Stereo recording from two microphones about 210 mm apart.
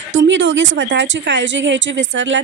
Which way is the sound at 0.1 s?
60° right (ahead or behind).